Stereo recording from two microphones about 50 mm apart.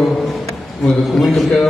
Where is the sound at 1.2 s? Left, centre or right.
Centre.